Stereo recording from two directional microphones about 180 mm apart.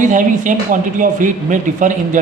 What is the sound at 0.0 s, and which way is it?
Speech, 45° right (ahead or behind).